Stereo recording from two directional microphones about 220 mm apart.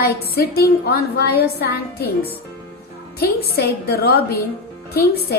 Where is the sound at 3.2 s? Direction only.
45° left (ahead or behind).